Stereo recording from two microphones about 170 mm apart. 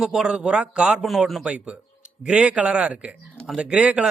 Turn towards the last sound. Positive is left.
turn(degrees=-5)  # may be behind; listen again after turning